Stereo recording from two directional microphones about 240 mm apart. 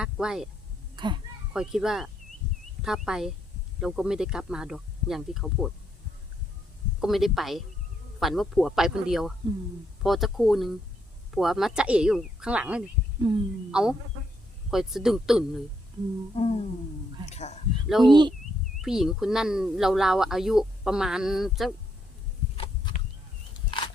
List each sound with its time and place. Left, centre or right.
0.0 s speech: centre
0.9 s speech: centre
1.5 s speech: centre
7.0 s speech: centre
13.2 s speech: right
13.7 s speech: centre
16.3 s music: left
17.2 s speech: left
18.0 s speech: centre
18.8 s speech: centre